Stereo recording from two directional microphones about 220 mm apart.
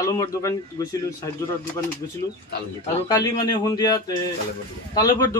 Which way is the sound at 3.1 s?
15° left (ahead or behind).